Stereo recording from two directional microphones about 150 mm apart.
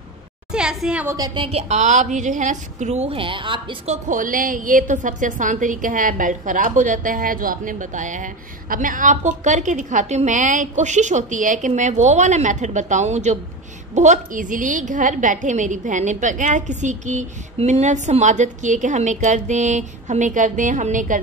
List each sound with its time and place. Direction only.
0.5 s a woman's voice: 5° right (ahead or behind)
1.0 s a woman's voice: 25° right (ahead or behind)
3.9 s a woman's voice: 60° right (ahead or behind)